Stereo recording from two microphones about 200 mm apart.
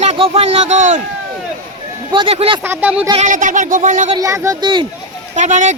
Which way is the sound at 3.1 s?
35° right (ahead or behind).